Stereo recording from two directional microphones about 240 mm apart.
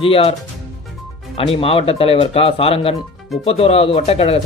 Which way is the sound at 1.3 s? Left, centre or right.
Left.